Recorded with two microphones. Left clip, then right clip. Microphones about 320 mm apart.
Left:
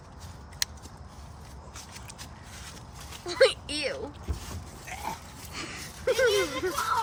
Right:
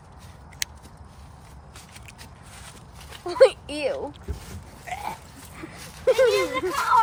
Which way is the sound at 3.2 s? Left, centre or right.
Centre.